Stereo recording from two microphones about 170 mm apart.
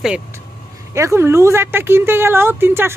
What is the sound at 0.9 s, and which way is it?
A woman's voice, 15° right (ahead or behind).